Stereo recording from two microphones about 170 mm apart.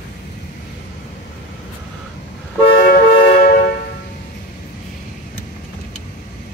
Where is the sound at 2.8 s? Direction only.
60° left (ahead or behind).